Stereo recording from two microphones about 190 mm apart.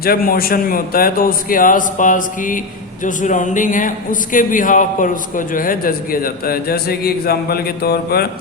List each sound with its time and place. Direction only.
0.0 s a man's voice: 50° left (ahead or behind)